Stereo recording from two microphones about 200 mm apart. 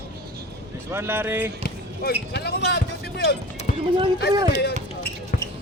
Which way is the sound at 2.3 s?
55° left (ahead or behind).